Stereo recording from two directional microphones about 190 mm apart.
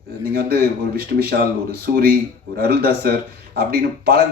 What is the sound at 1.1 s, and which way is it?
A man's voice, 50° right (ahead or behind).